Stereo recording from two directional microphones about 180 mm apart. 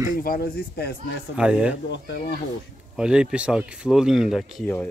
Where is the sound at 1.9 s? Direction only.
75° left (ahead or behind).